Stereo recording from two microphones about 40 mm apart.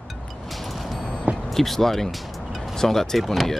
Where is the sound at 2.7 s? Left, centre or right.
Centre.